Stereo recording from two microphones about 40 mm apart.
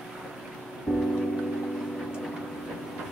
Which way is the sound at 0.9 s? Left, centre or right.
Right.